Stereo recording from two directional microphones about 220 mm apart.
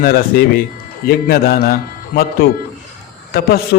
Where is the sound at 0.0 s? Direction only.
40° left (ahead or behind).